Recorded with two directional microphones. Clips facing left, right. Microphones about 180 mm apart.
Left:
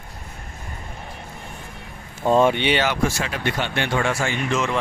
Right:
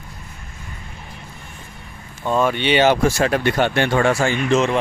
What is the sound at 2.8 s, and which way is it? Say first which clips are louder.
Speech: right 7 dB; 35° right (ahead or behind).